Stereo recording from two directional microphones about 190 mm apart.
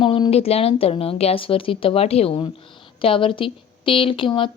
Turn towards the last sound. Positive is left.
turn(degrees=25)  # may be behind; listen again after turning